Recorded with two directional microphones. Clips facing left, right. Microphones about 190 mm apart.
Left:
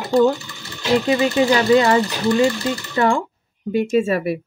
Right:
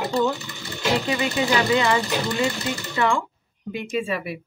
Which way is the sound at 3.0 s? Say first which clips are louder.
Left 4 dB; 45° left (ahead or behind).